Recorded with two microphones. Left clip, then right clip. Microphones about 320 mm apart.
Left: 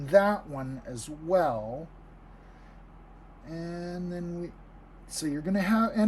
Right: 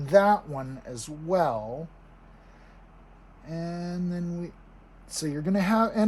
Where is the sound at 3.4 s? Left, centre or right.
Centre.